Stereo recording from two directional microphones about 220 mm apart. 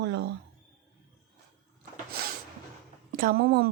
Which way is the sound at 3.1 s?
40° right (ahead or behind).